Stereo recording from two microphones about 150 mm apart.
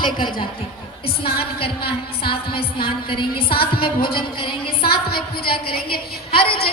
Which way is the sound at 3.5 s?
85° left.